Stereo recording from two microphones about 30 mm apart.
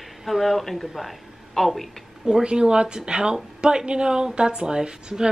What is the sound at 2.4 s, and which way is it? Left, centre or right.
A woman's voice, right.